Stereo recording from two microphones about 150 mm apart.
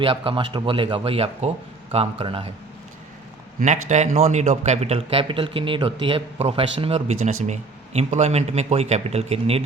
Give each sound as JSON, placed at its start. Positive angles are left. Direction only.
{"t": 0.0, "sound": "a man's voice", "side_deg": -35}
{"t": 3.6, "sound": "a man's voice", "side_deg": -50}